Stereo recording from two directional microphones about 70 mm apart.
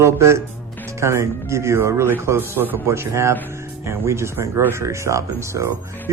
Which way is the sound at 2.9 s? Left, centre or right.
Right.